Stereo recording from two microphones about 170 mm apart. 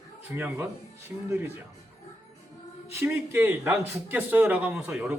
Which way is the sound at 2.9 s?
15° right (ahead or behind).